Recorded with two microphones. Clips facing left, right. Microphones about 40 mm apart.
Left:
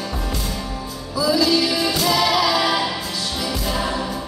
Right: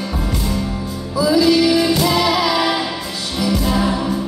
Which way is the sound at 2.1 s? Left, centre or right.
Centre.